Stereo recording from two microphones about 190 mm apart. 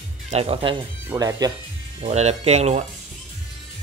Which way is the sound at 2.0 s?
35° right (ahead or behind).